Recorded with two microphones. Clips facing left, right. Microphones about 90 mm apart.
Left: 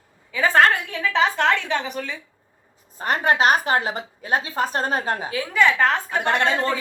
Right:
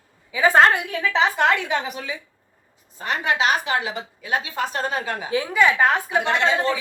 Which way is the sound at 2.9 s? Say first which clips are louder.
Left 3 dB; 45° left (ahead or behind).